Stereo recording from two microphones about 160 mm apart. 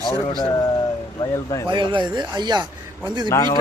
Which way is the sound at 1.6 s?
30° right (ahead or behind).